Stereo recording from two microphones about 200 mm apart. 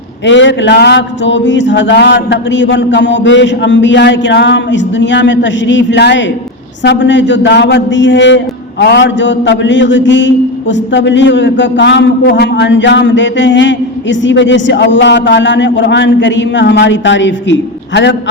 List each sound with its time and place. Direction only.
0.3 s a man's voice: 65° left (ahead or behind)